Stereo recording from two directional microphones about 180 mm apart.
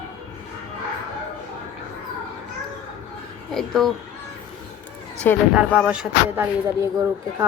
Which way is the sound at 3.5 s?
Centre (ahead or behind).